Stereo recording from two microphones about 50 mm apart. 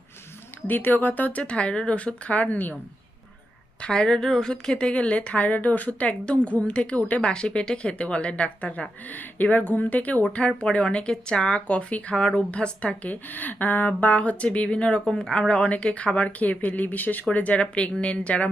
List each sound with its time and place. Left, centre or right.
0.7 s a woman's voice: left
3.8 s a woman's voice: centre
12.1 s a woman's voice: centre